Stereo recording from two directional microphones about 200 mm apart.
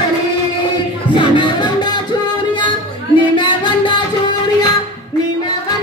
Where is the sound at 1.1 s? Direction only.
25° left (ahead or behind).